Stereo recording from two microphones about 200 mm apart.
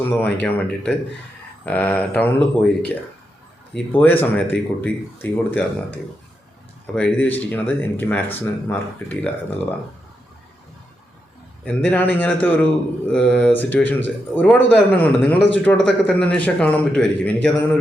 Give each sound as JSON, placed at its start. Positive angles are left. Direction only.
{"t": 0.0, "sound": "speech", "side_deg": 10}
{"t": 3.8, "sound": "speech", "side_deg": 10}
{"t": 6.9, "sound": "speech", "side_deg": 5}
{"t": 11.6, "sound": "a man's voice", "side_deg": 10}